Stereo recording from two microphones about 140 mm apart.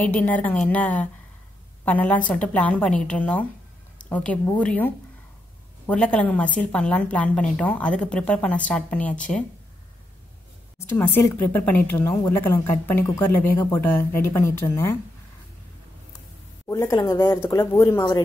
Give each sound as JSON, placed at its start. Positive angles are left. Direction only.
{"t": 0.0, "sound": "a woman's voice", "side_deg": 10}
{"t": 11.0, "sound": "a woman's voice", "side_deg": 15}
{"t": 16.6, "sound": "speech", "side_deg": 20}